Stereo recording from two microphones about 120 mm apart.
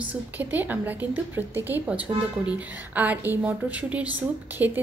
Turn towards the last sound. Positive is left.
turn(degrees=-15)  # may be behind; listen again after turning